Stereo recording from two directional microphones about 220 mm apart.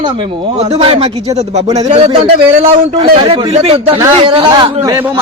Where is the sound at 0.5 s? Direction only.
25° right (ahead or behind).